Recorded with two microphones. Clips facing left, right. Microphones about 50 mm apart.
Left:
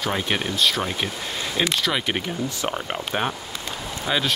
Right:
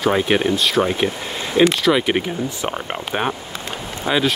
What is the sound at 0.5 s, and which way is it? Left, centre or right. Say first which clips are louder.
Speech: right 4 dB; centre.